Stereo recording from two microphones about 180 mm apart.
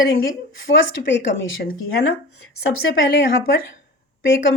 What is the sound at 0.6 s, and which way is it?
Speech, 90° left.